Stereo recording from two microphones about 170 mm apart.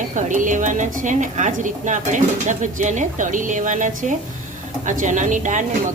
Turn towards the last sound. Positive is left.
turn(degrees=-45)  # may be behind; listen again after turning